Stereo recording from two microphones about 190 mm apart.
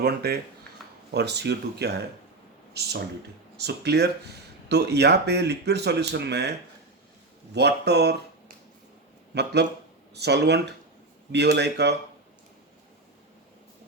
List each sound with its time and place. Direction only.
0.0 s speech: 55° right (ahead or behind)
7.5 s speech: 60° right (ahead or behind)